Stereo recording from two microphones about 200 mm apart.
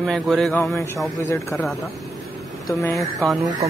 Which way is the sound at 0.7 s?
10° left (ahead or behind).